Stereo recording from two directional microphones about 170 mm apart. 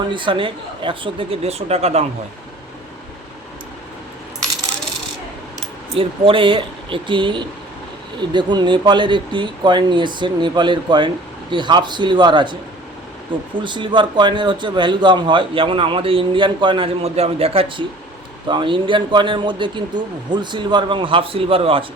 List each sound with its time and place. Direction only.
0.1 s speech: 30° right (ahead or behind)
5.9 s a man's voice: 30° right (ahead or behind)
13.6 s a man's voice: 30° right (ahead or behind)